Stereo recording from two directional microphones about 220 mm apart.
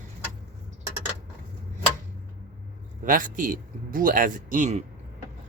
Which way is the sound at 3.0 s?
35° right (ahead or behind).